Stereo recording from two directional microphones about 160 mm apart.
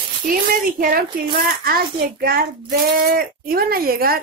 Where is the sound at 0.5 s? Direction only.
60° right (ahead or behind).